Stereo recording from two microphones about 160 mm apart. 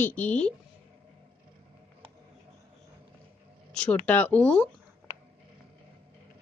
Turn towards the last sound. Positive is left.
turn(degrees=10)  # may be behind; listen again after turning